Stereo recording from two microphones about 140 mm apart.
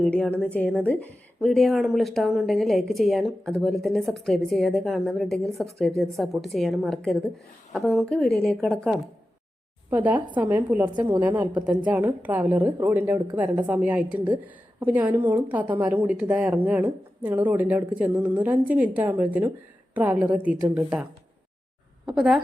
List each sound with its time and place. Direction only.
0.0 s a woman's voice: 10° left (ahead or behind)
9.9 s a woman's voice: 10° right (ahead or behind)